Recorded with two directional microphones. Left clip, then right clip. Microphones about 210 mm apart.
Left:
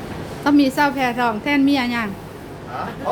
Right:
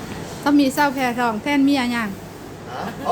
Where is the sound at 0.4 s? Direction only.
5° left (ahead or behind).